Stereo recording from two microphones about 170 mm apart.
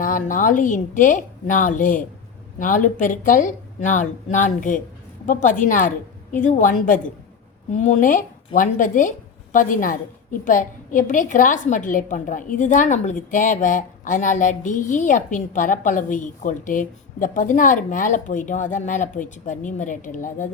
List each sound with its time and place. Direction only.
0.0 s a woman's voice: 50° left (ahead or behind)